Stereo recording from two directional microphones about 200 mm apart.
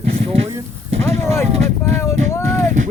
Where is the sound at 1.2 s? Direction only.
10° left (ahead or behind).